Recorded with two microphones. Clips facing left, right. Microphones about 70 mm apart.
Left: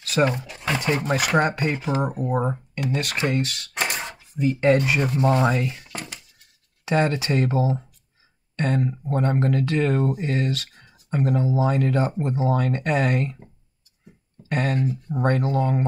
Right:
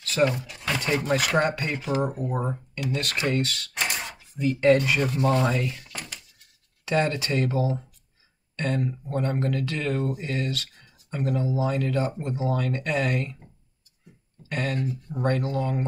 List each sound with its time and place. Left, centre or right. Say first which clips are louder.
0.2 s speech: left 2 dB; left
1.0 s speech: left 1 dB; centre
14.5 s speech: left 4 dB; left